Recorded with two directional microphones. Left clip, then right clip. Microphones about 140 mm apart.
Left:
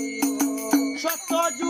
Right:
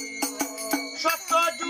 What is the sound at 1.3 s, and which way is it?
Jingle bell, 45° left (ahead or behind).